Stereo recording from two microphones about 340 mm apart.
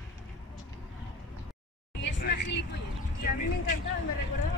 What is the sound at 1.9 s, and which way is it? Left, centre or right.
Vehicle, left.